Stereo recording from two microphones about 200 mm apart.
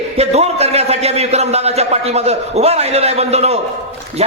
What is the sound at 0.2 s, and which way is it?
A man's voice, 30° right (ahead or behind).